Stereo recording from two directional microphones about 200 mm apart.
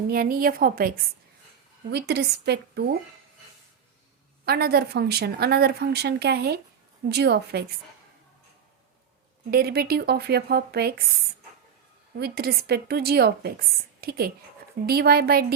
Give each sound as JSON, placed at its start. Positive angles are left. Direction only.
{"t": 0.1, "sound": "a woman's voice", "side_deg": -45}
{"t": 4.4, "sound": "a woman's voice", "side_deg": -50}
{"t": 9.5, "sound": "speech", "side_deg": -50}
{"t": 12.2, "sound": "speech", "side_deg": -50}